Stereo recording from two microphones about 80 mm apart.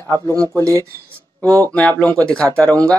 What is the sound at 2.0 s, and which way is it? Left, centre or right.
Speech, centre.